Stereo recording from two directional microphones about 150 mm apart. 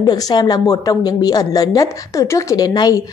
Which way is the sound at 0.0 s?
25° left (ahead or behind).